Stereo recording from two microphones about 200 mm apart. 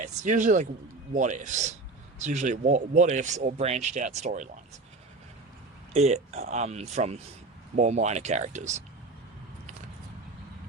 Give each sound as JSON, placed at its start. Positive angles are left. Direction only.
{"t": 0.0, "sound": "speech", "side_deg": -35}
{"t": 5.9, "sound": "speech", "side_deg": -35}